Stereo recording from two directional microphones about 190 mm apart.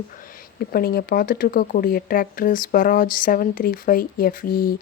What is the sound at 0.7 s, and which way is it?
Speech, 55° left (ahead or behind).